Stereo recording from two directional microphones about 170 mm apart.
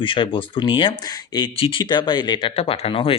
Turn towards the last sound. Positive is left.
turn(degrees=30)  # may be behind; listen again after turning